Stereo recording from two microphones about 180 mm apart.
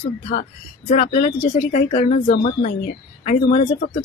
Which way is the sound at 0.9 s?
45° left (ahead or behind).